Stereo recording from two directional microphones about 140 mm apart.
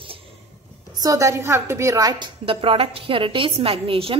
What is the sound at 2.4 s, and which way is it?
A woman's voice, 40° right (ahead or behind).